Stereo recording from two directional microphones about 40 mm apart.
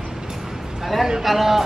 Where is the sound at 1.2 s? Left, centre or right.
Centre.